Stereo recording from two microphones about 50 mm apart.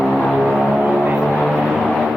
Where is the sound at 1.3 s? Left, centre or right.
Centre.